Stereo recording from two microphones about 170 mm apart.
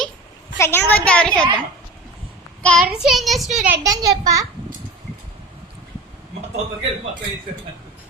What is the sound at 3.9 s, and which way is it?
Speech, 20° right (ahead or behind).